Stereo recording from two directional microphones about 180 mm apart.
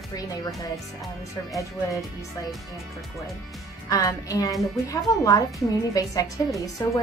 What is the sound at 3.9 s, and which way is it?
A woman's voice, 20° left (ahead or behind).